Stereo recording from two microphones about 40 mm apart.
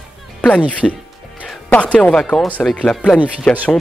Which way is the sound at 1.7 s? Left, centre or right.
Left.